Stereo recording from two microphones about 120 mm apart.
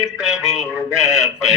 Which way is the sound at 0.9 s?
25° left (ahead or behind).